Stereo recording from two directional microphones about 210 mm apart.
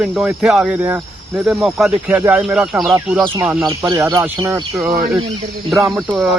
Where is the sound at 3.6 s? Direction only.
20° right (ahead or behind).